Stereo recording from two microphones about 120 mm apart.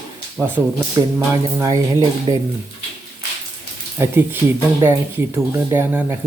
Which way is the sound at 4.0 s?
20° right (ahead or behind).